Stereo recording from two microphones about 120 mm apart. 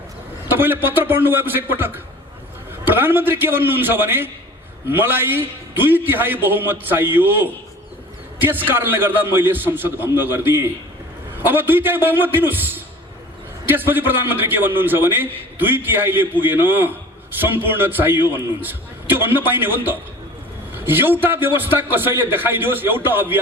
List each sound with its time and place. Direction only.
0.4 s a man's voice: 15° right (ahead or behind)